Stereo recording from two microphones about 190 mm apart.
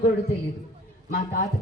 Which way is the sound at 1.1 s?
45° left (ahead or behind).